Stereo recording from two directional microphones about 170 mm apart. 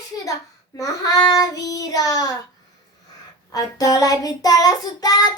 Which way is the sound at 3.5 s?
20° left (ahead or behind).